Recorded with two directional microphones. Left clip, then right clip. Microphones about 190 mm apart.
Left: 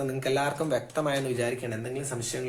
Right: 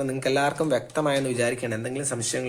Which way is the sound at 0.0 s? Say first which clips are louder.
Right 4 dB; 30° right (ahead or behind).